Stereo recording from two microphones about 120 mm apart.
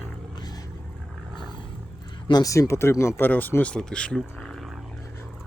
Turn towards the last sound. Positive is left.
turn(degrees=5)  # may be behind; listen again after turning